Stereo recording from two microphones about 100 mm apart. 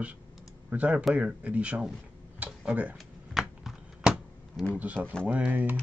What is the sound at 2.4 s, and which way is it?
Tick-tock, 10° right (ahead or behind).